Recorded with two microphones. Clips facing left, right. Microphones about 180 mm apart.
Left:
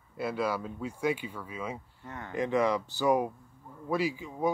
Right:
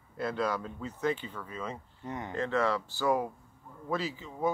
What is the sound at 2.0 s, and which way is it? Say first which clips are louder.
Speech: right 7 dB; 20° right (ahead or behind).